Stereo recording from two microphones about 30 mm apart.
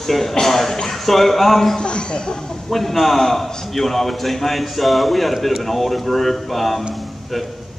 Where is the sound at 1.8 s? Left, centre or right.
Left.